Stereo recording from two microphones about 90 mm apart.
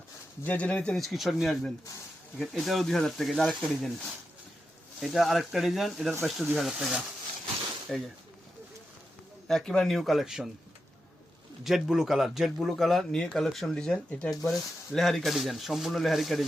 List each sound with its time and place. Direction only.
0.4 s speech: 15° left (ahead or behind)
0.9 s a man's voice: centre (ahead or behind)
4.9 s a man's voice: centre (ahead or behind)
9.5 s a man's voice: 5° left (ahead or behind)
11.6 s a man's voice: 5° right (ahead or behind)